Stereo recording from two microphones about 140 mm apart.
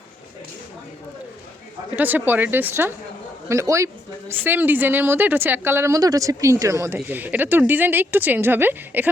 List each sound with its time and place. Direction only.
2.0 s speech: 15° right (ahead or behind)